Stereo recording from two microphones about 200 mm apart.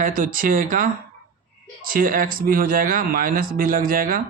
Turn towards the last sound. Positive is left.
turn(degrees=-45)  # may be behind; listen again after turning